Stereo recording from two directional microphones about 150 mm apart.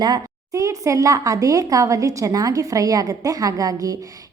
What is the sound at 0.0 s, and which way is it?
A woman's voice, 25° right (ahead or behind).